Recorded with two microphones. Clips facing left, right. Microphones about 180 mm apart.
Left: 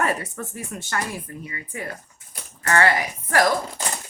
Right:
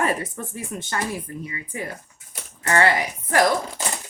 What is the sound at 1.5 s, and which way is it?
Speech, 25° right (ahead or behind).